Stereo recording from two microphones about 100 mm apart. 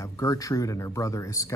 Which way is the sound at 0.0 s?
35° left (ahead or behind).